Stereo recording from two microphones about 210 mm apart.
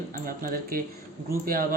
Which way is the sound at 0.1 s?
40° right (ahead or behind).